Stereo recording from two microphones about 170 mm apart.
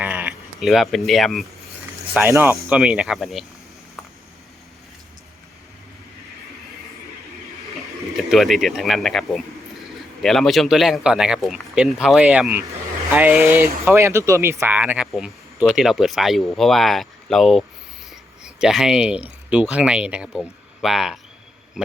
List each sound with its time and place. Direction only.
0.0 s sheep: 10° right (ahead or behind)
2.1 s speech: 10° right (ahead or behind)
8.1 s speech: centre (ahead or behind)